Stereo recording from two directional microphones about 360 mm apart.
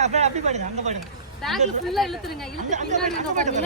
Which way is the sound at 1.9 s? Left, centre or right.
Centre.